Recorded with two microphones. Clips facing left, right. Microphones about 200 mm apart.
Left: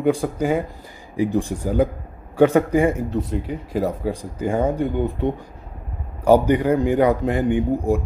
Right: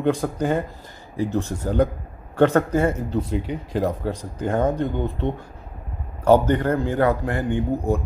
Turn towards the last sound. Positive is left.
turn(degrees=15)  # may be behind; listen again after turning